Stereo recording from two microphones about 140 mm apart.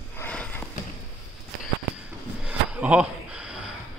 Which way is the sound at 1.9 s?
10° right (ahead or behind).